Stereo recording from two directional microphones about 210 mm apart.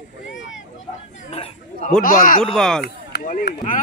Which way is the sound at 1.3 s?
30° left (ahead or behind).